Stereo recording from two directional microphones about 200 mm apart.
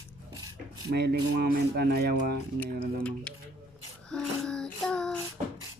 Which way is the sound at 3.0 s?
5° left (ahead or behind).